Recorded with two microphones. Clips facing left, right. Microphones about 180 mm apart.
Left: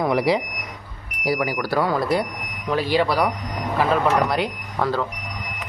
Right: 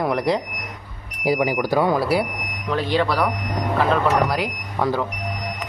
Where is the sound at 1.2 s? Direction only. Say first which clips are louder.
Right 3 dB; 20° right (ahead or behind).